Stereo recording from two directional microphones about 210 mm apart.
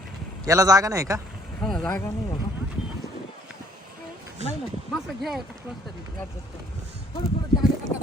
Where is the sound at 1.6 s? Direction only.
Centre (ahead or behind).